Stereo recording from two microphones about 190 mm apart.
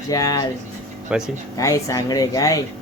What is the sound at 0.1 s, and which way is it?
Speech, 20° left (ahead or behind).